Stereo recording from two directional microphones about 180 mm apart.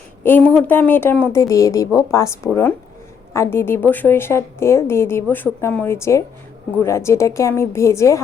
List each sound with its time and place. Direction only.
0.2 s speech: 10° left (ahead or behind)